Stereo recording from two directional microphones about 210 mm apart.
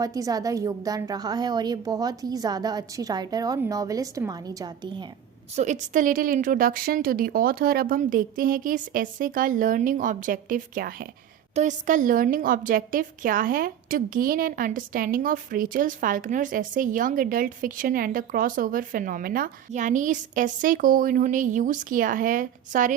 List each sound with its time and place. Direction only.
0.0 s a woman's voice: 15° right (ahead or behind)
5.5 s a woman's voice: 35° right (ahead or behind)